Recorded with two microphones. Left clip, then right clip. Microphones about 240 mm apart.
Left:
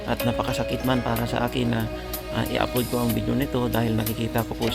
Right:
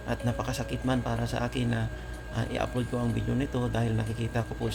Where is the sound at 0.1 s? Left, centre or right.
Left.